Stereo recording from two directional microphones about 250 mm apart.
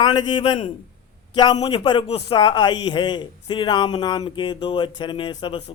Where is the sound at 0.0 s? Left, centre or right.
Centre.